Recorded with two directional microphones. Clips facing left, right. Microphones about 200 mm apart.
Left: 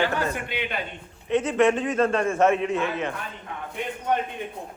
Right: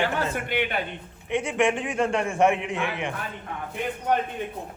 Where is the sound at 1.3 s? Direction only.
15° right (ahead or behind).